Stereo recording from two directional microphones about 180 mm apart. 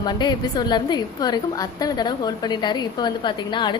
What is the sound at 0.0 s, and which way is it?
A woman's voice, 25° left (ahead or behind).